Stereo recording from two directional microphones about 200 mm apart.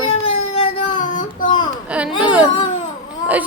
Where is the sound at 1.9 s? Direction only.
5° right (ahead or behind).